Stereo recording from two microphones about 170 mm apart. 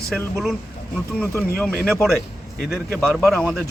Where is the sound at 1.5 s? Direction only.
5° left (ahead or behind).